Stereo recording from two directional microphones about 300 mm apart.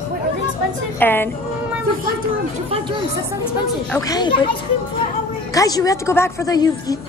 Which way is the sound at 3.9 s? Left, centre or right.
Centre.